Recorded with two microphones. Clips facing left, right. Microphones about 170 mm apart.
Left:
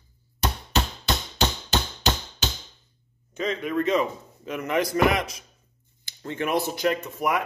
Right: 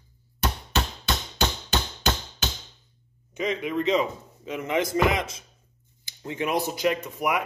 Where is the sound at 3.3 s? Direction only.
15° right (ahead or behind).